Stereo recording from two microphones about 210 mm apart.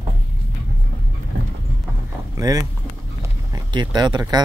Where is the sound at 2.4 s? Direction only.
15° right (ahead or behind).